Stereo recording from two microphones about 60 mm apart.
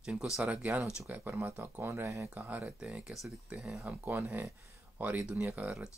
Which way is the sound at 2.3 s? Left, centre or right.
Right.